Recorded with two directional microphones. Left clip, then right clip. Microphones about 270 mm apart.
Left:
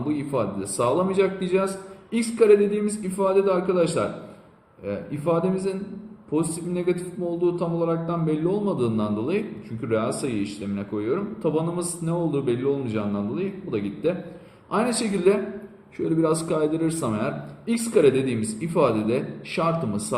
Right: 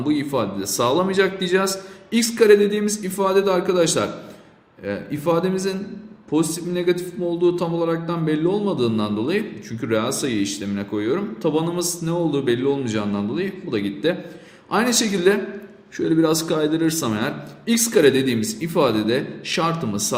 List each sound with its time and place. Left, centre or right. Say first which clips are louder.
0.1 s speech: right 4 dB; right